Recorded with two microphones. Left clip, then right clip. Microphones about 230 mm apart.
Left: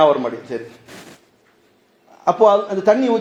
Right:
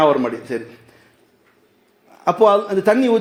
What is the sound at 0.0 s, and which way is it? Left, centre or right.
Speech, right.